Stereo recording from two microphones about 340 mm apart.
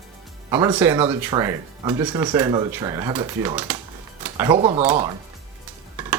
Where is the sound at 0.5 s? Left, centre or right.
Centre.